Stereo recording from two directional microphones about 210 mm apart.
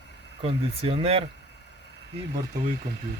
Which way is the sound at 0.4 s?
25° right (ahead or behind).